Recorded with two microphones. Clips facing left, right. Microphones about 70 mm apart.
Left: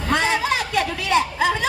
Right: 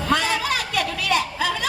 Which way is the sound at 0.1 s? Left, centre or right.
Left.